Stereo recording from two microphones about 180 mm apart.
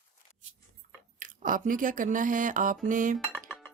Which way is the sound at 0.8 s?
50° right (ahead or behind).